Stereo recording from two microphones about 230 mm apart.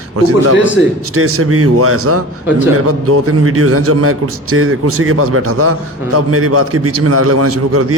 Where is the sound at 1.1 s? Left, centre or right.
Right.